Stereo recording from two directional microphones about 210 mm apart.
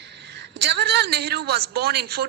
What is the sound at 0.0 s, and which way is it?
A woman's voice, 55° right (ahead or behind).